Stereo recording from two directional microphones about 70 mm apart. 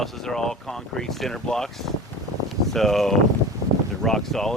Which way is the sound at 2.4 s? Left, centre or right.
Centre.